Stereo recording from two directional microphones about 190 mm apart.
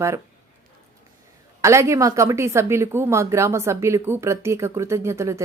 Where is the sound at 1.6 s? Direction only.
15° right (ahead or behind).